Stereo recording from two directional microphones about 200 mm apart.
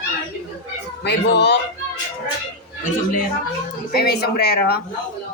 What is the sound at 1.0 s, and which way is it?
Speech, 60° left (ahead or behind).